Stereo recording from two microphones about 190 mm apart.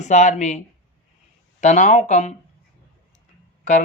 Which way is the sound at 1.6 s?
35° left (ahead or behind).